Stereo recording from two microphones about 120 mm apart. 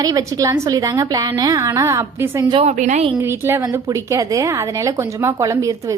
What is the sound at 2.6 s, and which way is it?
Speech, 85° right.